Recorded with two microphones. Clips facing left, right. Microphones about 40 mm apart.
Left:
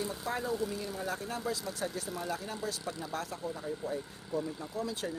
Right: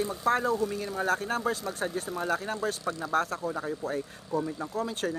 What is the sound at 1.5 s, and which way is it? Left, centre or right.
Speech, right.